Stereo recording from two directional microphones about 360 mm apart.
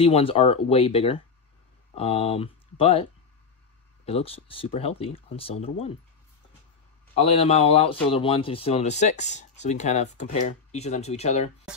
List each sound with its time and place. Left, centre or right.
0.0 s speech: centre
7.2 s speech: centre